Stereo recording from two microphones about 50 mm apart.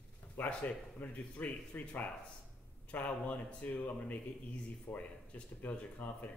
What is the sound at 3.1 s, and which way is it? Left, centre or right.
A man's voice, left.